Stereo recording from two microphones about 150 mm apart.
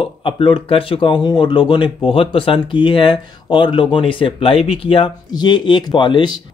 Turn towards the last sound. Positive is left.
turn(degrees=30)  # may be behind; listen again after turning